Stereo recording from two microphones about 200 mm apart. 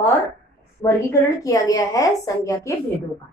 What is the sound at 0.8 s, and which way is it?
A woman's voice, 15° left (ahead or behind).